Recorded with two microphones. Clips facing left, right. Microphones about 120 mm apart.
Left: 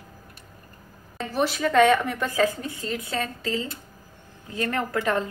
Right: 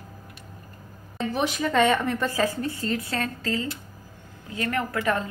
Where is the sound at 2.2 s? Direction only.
5° right (ahead or behind).